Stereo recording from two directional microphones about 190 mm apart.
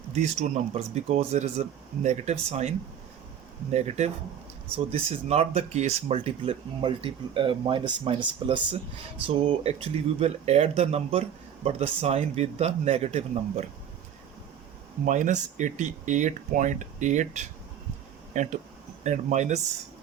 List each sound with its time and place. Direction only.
0.1 s speech: 35° right (ahead or behind)
15.0 s speech: 40° right (ahead or behind)